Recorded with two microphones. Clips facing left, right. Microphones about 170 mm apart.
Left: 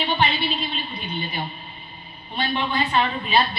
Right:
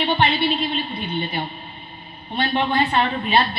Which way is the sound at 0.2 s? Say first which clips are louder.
Right 4 dB; 60° right (ahead or behind).